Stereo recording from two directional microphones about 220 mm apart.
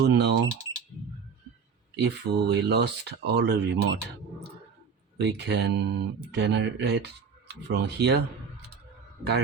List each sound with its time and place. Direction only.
0.0 s speech: 50° right (ahead or behind)
2.0 s speech: 50° right (ahead or behind)
5.1 s speech: 50° right (ahead or behind)